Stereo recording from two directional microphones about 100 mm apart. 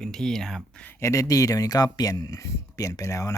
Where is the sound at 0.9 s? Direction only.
30° left (ahead or behind).